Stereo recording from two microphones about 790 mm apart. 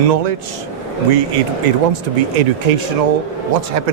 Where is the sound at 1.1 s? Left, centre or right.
Right.